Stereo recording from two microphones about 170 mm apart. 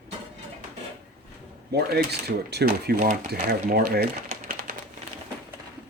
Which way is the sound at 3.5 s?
65° right (ahead or behind).